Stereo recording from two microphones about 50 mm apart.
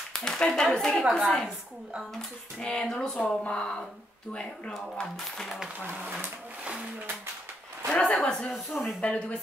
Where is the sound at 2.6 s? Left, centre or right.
Centre.